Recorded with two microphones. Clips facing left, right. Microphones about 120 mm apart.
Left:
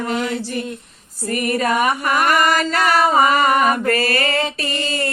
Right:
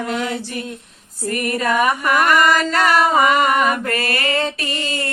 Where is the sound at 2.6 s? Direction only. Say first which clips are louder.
Right 1 dB; 40° right (ahead or behind).